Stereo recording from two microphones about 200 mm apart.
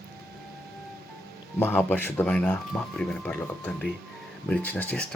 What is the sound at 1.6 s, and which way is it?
Speech, 10° left (ahead or behind).